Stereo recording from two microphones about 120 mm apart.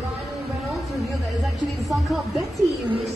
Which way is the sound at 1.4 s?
Centre (ahead or behind).